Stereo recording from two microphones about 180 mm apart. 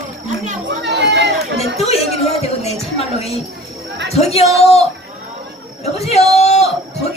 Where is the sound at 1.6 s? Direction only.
35° left (ahead or behind).